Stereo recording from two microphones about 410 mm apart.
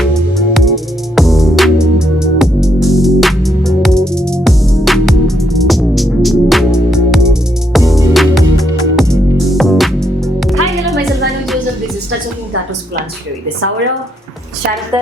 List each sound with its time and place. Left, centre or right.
0.0 s music: centre